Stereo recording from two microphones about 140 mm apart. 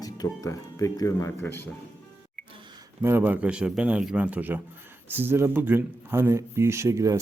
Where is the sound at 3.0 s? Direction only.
15° right (ahead or behind).